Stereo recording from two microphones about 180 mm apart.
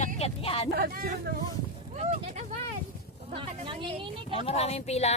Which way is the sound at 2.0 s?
40° right (ahead or behind).